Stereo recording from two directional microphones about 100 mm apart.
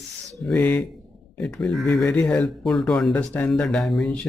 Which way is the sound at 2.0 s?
15° left (ahead or behind).